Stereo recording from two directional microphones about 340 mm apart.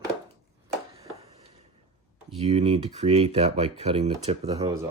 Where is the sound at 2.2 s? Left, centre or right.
Centre.